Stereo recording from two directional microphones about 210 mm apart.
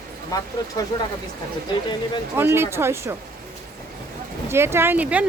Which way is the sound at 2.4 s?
10° right (ahead or behind).